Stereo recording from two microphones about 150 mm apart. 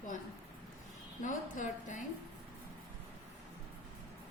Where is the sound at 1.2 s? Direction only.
60° left (ahead or behind).